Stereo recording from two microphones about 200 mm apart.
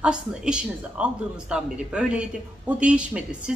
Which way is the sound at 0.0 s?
5° right (ahead or behind).